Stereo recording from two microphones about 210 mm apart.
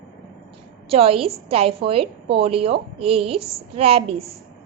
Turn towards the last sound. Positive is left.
turn(degrees=-30)  # may be behind; listen again after turning